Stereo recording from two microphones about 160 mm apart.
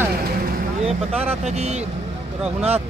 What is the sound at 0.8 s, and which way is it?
Speech, 40° right (ahead or behind).